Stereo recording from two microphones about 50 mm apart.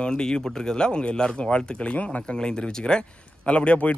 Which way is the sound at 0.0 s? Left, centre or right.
Centre.